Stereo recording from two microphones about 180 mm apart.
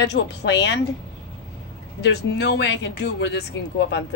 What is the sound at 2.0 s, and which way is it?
Speech, 70° left (ahead or behind).